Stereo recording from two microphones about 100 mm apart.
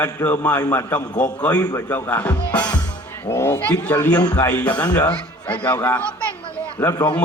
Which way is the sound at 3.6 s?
15° left (ahead or behind).